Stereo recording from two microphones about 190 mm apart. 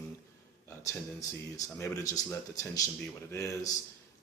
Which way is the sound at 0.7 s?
15° left (ahead or behind).